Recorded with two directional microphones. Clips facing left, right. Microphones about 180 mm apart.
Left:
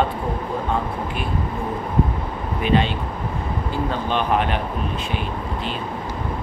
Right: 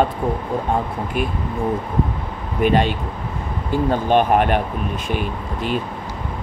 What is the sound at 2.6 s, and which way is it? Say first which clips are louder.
Speech: right 3 dB; 50° right (ahead or behind).